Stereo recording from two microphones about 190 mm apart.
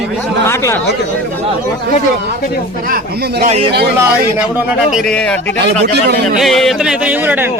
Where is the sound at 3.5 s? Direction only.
30° right (ahead or behind).